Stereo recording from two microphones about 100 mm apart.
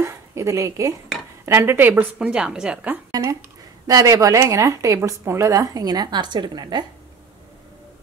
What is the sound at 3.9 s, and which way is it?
Speech, 35° right (ahead or behind).